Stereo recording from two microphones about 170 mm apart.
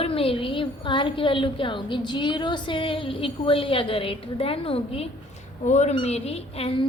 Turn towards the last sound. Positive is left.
turn(degrees=35)  # may be behind; listen again after turning